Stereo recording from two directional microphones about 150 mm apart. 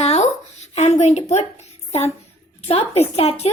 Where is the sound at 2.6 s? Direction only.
40° left (ahead or behind).